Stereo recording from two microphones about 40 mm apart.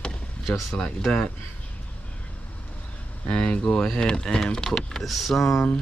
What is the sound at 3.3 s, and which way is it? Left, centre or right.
Speech, left.